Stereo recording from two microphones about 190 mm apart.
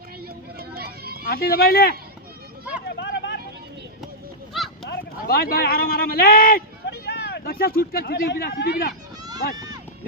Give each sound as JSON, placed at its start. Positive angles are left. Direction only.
{"t": 0.7, "sound": "run", "side_deg": -55}
{"t": 1.2, "sound": "speech", "side_deg": 55}
{"t": 3.0, "sound": "vehicle", "side_deg": 65}
{"t": 4.5, "sound": "a sound", "side_deg": 0}
{"t": 4.9, "sound": "speech", "side_deg": 50}
{"t": 9.2, "sound": "run", "side_deg": -20}